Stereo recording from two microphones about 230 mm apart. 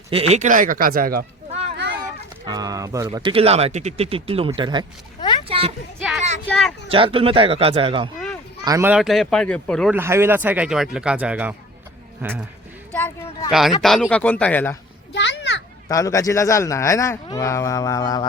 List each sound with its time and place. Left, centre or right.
0.1 s speech: right
2.5 s speech: centre
6.5 s speech: centre
6.8 s speech: right; by 9.9 s centre
9.9 s speech: centre
12.9 s a sound: centre
13.5 s speech: centre
15.1 s children playing: left
15.9 s speech: centre